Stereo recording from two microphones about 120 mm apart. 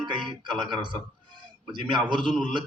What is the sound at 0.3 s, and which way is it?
Speech, 40° right (ahead or behind).